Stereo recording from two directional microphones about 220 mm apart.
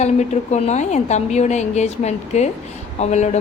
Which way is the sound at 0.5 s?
30° left (ahead or behind).